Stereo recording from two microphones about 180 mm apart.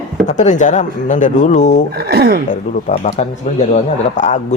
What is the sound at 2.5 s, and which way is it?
Speech, 40° left (ahead or behind).